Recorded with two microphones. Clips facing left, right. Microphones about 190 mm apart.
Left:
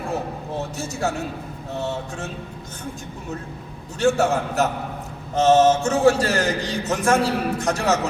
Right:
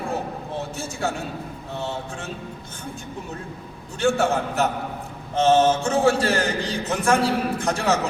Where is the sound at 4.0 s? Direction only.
40° left (ahead or behind).